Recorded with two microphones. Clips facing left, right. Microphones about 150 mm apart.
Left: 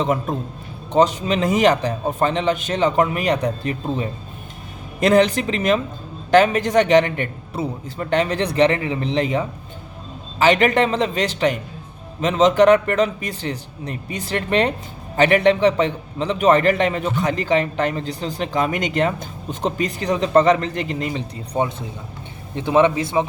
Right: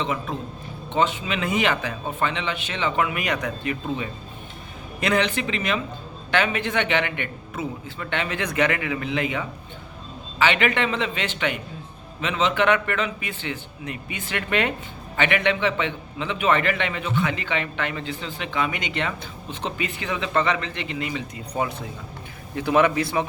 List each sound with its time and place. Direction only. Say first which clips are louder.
0.0 s a man's voice: left 6 dB; 45° left (ahead or behind); by 23.2 s 20° left (ahead or behind)